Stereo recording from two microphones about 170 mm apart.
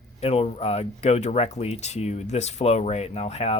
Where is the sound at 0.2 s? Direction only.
35° left (ahead or behind).